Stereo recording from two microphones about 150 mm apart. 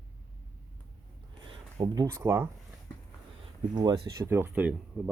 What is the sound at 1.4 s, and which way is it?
Speech, 35° right (ahead or behind).